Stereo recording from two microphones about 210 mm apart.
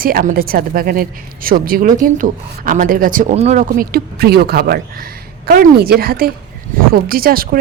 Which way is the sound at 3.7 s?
45° right (ahead or behind).